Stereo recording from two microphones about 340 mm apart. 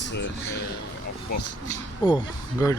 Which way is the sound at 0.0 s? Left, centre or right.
Left.